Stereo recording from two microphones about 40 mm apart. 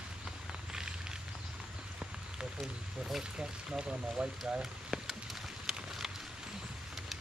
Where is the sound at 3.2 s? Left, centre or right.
Centre.